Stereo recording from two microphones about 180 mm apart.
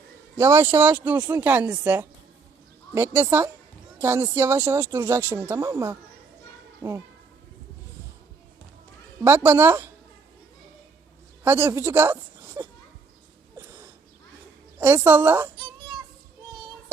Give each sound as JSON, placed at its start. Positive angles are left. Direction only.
{"t": 0.3, "sound": "speech", "side_deg": -15}
{"t": 9.2, "sound": "speech", "side_deg": -10}
{"t": 11.4, "sound": "a woman's voice", "side_deg": -10}
{"t": 13.6, "sound": "a sound", "side_deg": -15}
{"t": 14.8, "sound": "speech", "side_deg": -15}